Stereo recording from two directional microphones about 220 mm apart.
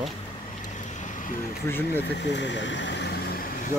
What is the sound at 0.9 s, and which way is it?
Vehicle, 35° left (ahead or behind).